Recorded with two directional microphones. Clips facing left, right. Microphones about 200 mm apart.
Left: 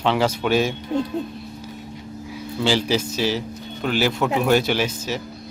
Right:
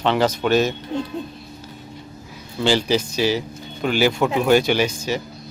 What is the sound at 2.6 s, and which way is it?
Speech, centre (ahead or behind).